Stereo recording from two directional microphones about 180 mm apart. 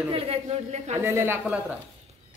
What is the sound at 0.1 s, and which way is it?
Speech, 35° right (ahead or behind).